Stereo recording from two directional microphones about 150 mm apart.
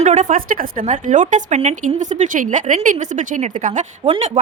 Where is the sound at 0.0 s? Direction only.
55° right (ahead or behind).